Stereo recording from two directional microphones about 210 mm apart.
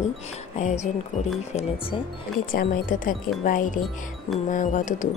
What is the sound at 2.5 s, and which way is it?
Speech, 40° left (ahead or behind).